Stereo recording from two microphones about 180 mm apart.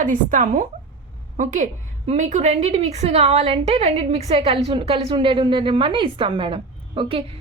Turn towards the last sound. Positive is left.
turn(degrees=-30)  # may be behind; listen again after turning